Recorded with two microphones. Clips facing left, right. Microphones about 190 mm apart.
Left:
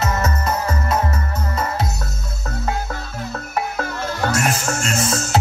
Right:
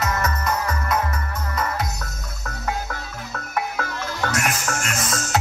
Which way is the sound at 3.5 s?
30° left (ahead or behind).